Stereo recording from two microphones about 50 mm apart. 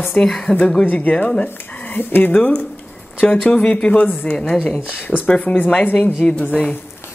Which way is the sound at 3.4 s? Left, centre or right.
Left.